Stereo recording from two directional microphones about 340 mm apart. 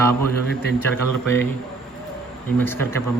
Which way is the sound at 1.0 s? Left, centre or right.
Right.